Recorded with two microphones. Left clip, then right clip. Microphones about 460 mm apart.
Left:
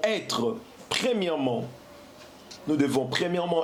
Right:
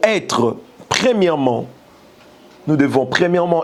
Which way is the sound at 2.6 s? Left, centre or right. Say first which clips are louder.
Right 10 dB; right.